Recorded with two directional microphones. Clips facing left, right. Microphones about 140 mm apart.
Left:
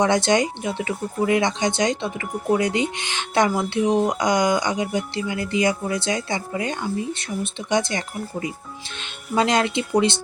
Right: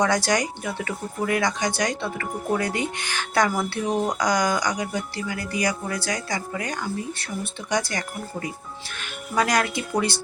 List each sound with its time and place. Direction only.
0.0 s speech: 25° left (ahead or behind)